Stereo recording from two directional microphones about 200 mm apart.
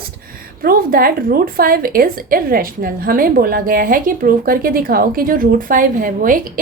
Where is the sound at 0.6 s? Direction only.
45° right (ahead or behind).